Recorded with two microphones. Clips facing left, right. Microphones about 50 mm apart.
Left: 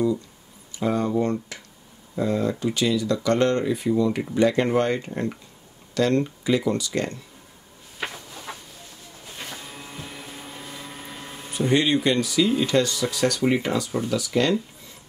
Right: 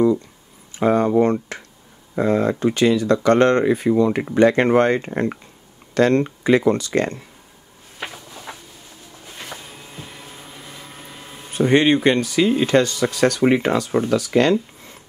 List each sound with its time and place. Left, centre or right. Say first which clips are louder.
0.7 s speech: right 7 dB; right
8.5 s a sound: even; centre
9.7 s vehicle: even; centre
11.5 s speech: right 5 dB; right